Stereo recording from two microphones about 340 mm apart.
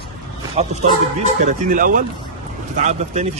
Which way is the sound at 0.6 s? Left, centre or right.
Centre.